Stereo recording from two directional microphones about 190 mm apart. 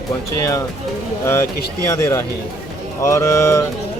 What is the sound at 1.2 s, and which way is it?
Speech, 15° left (ahead or behind).